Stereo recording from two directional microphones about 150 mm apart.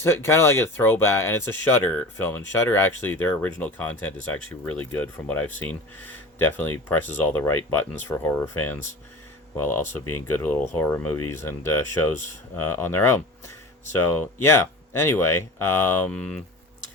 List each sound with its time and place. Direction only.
0.0 s speech: 15° left (ahead or behind)